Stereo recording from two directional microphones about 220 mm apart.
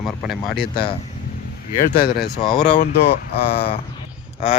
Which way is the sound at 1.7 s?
25° left (ahead or behind).